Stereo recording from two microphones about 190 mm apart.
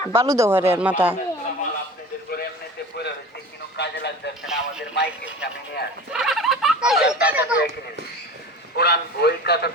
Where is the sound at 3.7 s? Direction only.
60° left (ahead or behind).